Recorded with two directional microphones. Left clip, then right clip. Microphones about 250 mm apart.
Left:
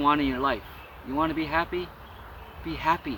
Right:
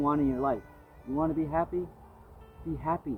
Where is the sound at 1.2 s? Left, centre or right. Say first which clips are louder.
Left 3 dB; centre.